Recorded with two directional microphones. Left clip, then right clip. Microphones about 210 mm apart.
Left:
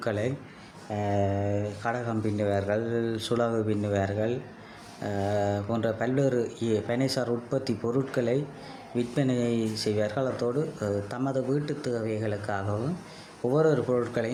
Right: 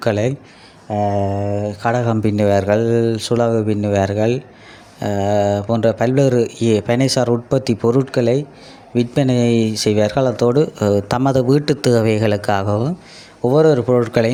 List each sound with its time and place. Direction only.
0.0 s speech: 35° right (ahead or behind)